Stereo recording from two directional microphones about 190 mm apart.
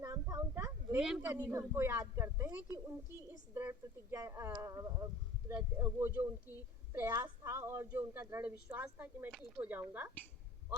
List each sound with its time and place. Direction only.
0.0 s a child's voice: 15° right (ahead or behind)